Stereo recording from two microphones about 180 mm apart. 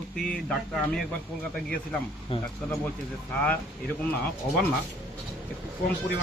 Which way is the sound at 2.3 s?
30° left (ahead or behind).